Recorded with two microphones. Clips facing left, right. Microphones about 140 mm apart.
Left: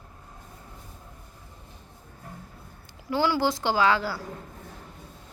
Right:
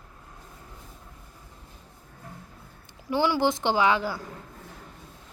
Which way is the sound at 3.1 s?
15° right (ahead or behind).